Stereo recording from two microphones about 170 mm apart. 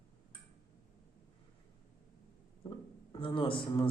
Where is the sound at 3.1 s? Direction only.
30° left (ahead or behind).